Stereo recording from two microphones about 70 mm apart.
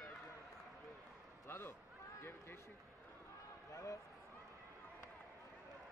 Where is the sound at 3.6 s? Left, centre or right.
Left.